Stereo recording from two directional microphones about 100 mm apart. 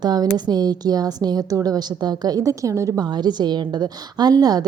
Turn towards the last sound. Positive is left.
turn(degrees=-40)  # may be behind; listen again after turning